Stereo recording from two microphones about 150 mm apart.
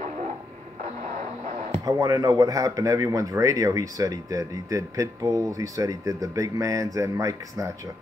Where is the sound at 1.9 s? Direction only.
25° right (ahead or behind).